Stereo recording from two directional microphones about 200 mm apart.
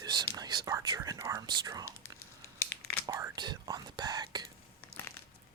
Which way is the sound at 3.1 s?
15° right (ahead or behind).